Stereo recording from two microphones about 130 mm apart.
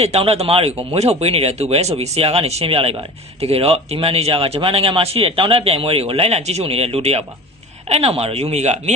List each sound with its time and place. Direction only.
0.0 s speech: 50° right (ahead or behind)